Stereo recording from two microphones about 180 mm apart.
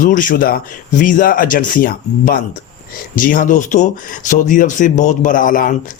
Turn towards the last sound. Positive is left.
turn(degrees=50)  # may be behind; listen again after turning